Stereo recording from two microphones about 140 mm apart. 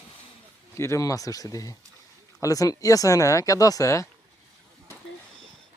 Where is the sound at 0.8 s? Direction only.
20° left (ahead or behind).